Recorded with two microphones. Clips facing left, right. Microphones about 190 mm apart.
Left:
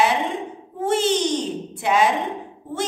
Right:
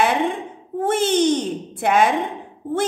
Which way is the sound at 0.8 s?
55° right (ahead or behind).